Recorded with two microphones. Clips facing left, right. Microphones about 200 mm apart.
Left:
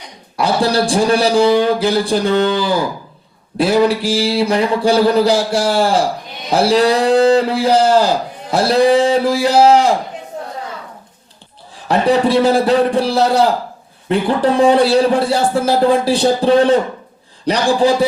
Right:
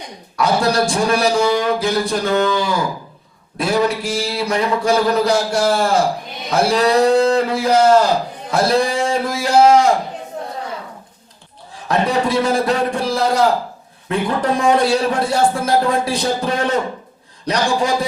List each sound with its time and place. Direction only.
0.3 s a man's voice: 30° left (ahead or behind)
11.7 s a man's voice: 30° left (ahead or behind)